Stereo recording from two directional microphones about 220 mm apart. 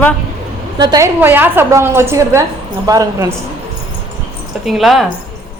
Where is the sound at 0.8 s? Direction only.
15° right (ahead or behind).